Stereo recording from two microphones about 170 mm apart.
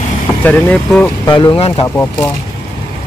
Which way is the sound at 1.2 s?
25° left (ahead or behind).